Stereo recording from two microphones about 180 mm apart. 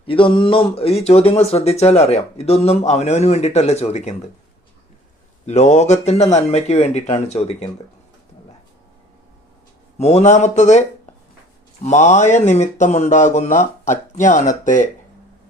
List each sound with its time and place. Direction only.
0.1 s speech: 30° left (ahead or behind)
5.5 s speech: 40° left (ahead or behind)
10.0 s speech: 35° left (ahead or behind)